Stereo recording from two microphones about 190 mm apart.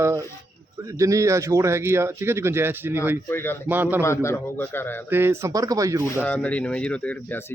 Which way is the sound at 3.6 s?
10° right (ahead or behind).